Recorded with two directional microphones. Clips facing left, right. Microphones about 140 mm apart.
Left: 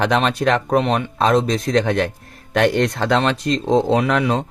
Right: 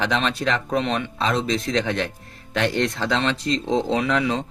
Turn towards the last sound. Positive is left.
turn(degrees=50)  # may be behind; listen again after turning